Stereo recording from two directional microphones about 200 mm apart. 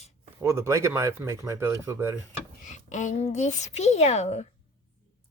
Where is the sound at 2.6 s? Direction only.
40° left (ahead or behind).